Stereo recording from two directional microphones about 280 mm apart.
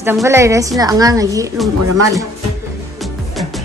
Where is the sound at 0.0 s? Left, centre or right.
Centre.